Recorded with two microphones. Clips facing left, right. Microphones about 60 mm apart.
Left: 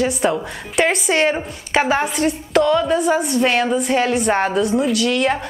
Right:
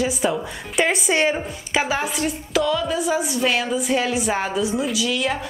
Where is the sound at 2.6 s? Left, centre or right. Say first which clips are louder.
Left 6 dB; left.